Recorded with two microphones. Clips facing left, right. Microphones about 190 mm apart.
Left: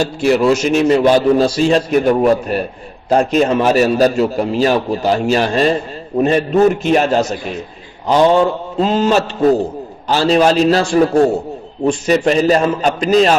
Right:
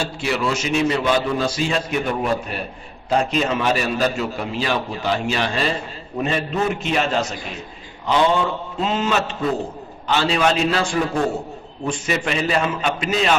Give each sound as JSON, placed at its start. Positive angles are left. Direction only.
{"t": 0.0, "sound": "a man's voice", "side_deg": 45}
{"t": 8.8, "sound": "a man's voice", "side_deg": 35}